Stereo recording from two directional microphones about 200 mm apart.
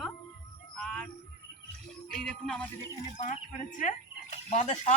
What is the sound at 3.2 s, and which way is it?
Speech, 40° left (ahead or behind).